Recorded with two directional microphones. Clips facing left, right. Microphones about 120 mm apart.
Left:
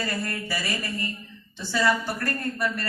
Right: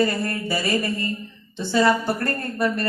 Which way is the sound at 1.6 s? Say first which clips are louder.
Right 5 dB; 25° right (ahead or behind).